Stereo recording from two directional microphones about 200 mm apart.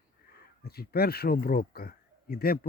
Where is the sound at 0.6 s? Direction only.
50° left (ahead or behind).